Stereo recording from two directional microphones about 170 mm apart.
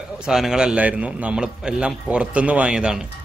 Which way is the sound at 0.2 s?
5° right (ahead or behind).